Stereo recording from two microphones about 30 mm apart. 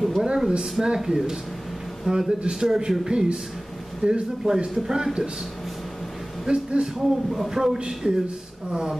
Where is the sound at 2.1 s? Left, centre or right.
Right.